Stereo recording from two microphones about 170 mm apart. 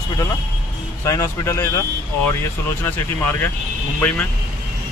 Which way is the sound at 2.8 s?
15° left (ahead or behind).